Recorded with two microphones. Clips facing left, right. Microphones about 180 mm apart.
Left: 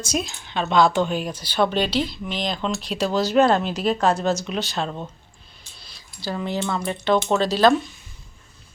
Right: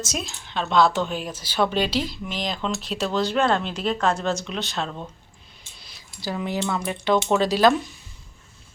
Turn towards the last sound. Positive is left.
turn(degrees=-10)  # may be behind; listen again after turning